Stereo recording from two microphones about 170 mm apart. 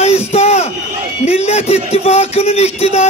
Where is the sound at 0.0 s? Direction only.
40° left (ahead or behind).